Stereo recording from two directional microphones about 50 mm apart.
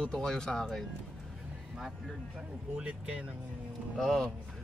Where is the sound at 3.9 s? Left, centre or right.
Centre.